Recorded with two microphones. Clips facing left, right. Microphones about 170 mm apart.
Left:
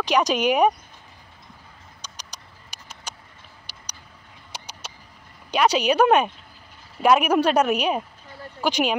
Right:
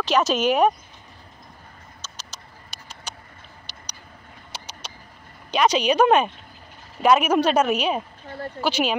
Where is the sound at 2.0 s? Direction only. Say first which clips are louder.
Even; 15° left (ahead or behind).